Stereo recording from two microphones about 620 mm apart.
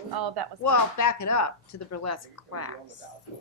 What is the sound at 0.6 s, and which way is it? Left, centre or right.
A woman's voice, left.